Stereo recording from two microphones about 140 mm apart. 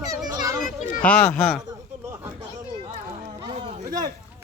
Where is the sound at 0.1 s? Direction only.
25° right (ahead or behind).